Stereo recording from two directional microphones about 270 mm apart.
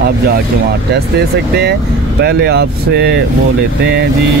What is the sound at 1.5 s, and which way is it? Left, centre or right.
Speech, right.